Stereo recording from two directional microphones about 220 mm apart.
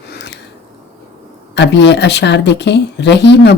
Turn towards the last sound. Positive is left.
turn(degrees=50)  # may be behind; listen again after turning